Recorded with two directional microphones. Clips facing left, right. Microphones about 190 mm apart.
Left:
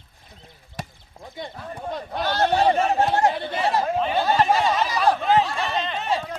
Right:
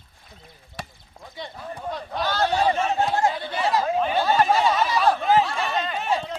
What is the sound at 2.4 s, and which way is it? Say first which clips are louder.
Speech: left 3 dB; 55° left (ahead or behind).